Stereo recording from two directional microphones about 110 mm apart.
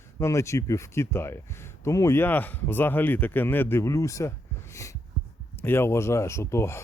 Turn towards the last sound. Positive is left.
turn(degrees=25)  # may be behind; listen again after turning